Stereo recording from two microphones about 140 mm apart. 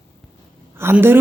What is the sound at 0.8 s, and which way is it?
Speech, 15° right (ahead or behind).